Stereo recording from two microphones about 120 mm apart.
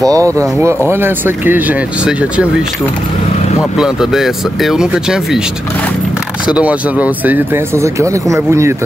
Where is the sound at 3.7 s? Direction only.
5° right (ahead or behind).